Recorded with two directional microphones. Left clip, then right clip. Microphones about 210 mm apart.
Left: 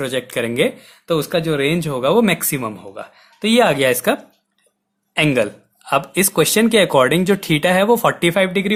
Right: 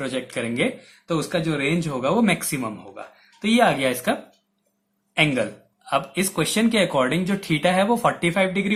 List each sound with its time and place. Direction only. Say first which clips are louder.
0.0 s speech: left 6 dB; 45° left (ahead or behind)
5.1 s a sound: left 4 dB; 50° left (ahead or behind)
6.1 s speech: left 8 dB; 50° left (ahead or behind)